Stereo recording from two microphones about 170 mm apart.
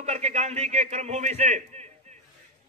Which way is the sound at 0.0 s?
40° right (ahead or behind).